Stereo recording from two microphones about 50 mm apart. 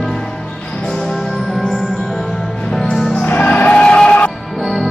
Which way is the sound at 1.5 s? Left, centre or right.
Centre.